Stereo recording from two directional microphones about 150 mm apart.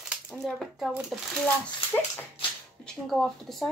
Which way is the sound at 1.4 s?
10° left (ahead or behind).